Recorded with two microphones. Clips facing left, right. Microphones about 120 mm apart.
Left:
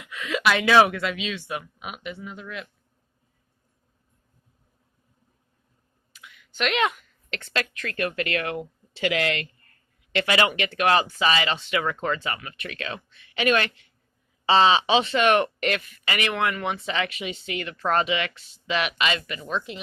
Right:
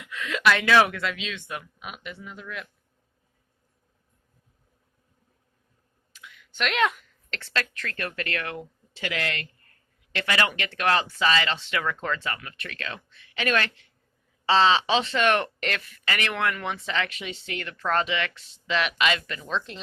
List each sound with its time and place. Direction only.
0.0 s speech: 5° left (ahead or behind)
6.6 s speech: 5° left (ahead or behind)
7.5 s speech: 15° left (ahead or behind)